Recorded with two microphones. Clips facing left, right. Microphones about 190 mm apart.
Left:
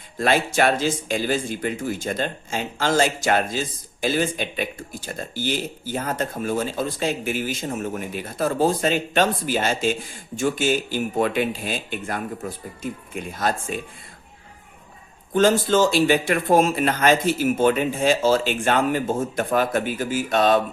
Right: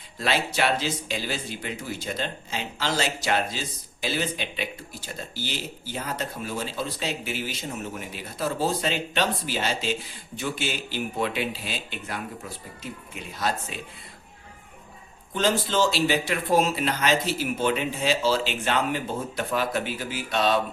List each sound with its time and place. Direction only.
0.2 s speech: 50° left (ahead or behind)
15.3 s speech: 50° left (ahead or behind)